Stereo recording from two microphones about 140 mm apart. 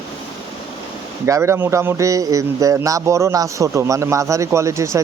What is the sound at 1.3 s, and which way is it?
Speech, 20° right (ahead or behind).